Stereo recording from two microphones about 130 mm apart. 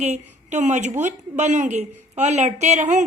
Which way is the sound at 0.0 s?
60° right (ahead or behind).